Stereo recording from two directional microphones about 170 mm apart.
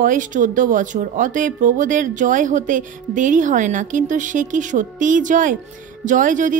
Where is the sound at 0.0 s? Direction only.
50° right (ahead or behind).